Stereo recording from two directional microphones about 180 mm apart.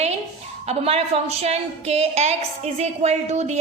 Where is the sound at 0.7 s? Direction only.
35° right (ahead or behind).